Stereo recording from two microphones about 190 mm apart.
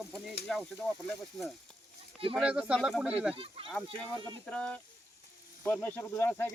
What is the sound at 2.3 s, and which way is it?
Speech, 5° right (ahead or behind).